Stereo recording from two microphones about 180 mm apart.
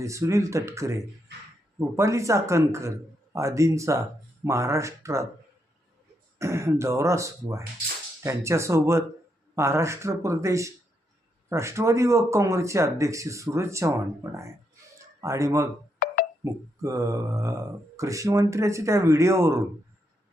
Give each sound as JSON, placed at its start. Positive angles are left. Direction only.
{"t": 0.0, "sound": "speech", "side_deg": -15}
{"t": 6.4, "sound": "speech", "side_deg": -15}
{"t": 16.0, "sound": "music", "side_deg": 55}
{"t": 16.4, "sound": "speech", "side_deg": -15}